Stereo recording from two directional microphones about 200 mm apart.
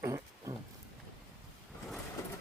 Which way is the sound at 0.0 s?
15° right (ahead or behind).